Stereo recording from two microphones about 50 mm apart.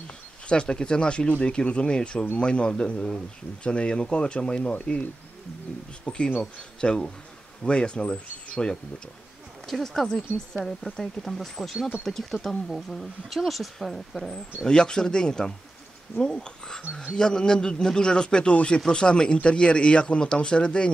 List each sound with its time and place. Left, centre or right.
0.5 s speech: centre
6.0 s speech: centre
9.7 s speech: centre
14.6 s speech: centre